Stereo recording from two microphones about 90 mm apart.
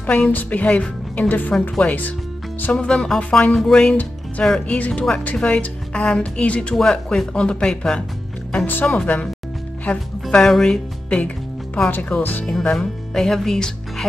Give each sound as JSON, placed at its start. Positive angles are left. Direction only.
{"t": 0.0, "sound": "a woman's voice", "side_deg": 15}
{"t": 3.9, "sound": "speech", "side_deg": 15}
{"t": 12.7, "sound": "speech", "side_deg": 5}